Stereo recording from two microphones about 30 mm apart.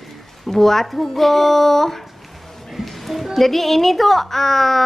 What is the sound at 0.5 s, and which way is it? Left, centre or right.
A woman's voice, centre.